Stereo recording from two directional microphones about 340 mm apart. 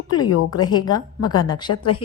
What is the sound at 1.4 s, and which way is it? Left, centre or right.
Speech, centre.